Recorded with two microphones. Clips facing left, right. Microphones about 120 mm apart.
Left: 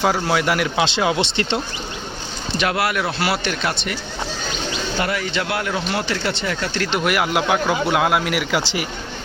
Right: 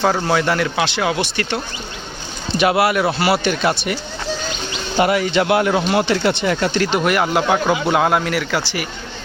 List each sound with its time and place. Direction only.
0.0 s speech: 10° left (ahead or behind)
2.6 s speech: 5° right (ahead or behind)
4.9 s speech: 15° right (ahead or behind)
6.9 s a man's voice: 5° left (ahead or behind); by 8.9 s 20° left (ahead or behind)